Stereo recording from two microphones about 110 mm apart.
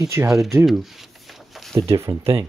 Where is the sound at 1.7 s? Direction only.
25° right (ahead or behind).